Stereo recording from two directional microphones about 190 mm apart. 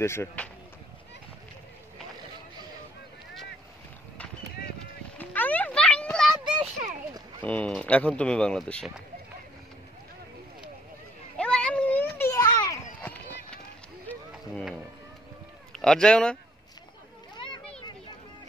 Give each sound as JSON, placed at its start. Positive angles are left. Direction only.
{"t": 0.0, "sound": "speech", "side_deg": 15}
{"t": 5.1, "sound": "a sound", "side_deg": 10}
{"t": 6.6, "sound": "a sound", "side_deg": -40}
{"t": 7.4, "sound": "speech", "side_deg": 5}
{"t": 11.3, "sound": "children playing", "side_deg": 5}
{"t": 13.0, "sound": "run", "side_deg": 10}
{"t": 14.3, "sound": "music", "side_deg": -5}
{"t": 15.7, "sound": "speech", "side_deg": 5}